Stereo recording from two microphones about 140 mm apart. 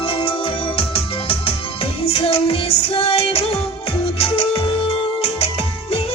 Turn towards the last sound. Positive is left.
turn(degrees=45)  # may be behind; listen again after turning